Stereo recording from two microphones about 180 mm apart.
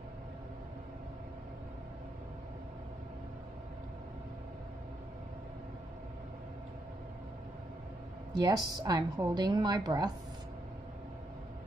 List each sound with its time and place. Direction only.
8.4 s a woman's voice: 20° right (ahead or behind)